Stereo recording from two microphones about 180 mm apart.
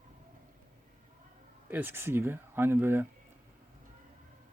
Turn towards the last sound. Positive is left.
turn(degrees=-10)  # may be behind; listen again after turning